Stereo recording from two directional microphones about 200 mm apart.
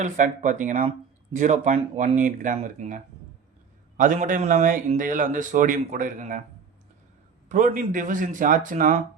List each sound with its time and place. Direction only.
0.0 s a man's voice: 35° right (ahead or behind)
7.4 s a man's voice: 40° right (ahead or behind)